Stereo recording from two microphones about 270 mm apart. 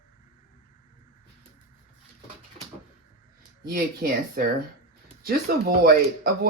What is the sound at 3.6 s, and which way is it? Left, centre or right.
Speech, right.